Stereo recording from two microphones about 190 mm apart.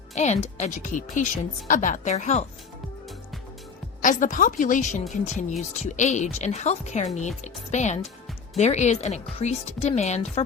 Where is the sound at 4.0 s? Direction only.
45° left (ahead or behind).